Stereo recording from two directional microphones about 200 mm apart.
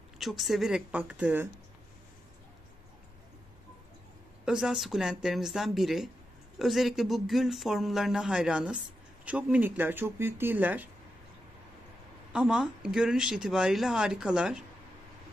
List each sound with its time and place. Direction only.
0.2 s speech: centre (ahead or behind)
4.5 s speech: centre (ahead or behind)
12.3 s speech: 5° right (ahead or behind)